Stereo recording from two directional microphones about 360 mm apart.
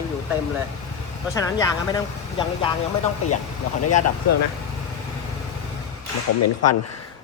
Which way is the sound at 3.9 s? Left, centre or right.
Left.